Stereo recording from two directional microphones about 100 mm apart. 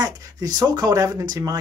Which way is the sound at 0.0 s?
40° right (ahead or behind).